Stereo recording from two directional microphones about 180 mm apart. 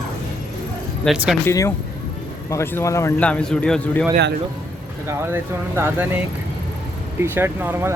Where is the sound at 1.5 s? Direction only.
15° left (ahead or behind).